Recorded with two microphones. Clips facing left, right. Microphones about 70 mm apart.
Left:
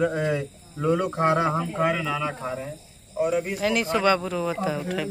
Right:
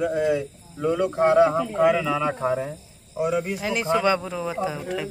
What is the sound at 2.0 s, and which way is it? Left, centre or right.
Speech, centre.